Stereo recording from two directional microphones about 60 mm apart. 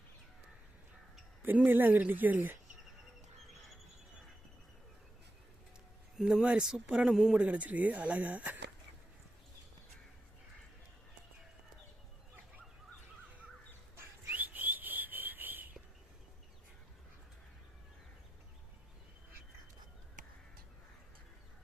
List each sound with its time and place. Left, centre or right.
1.4 s speech: right
6.1 s speech: centre
7.4 s speech: right
14.3 s whistling: right